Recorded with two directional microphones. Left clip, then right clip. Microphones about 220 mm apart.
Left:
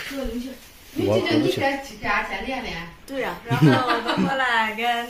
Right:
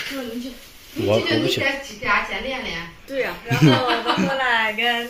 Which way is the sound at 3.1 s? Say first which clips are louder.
Right 3 dB; 40° left (ahead or behind).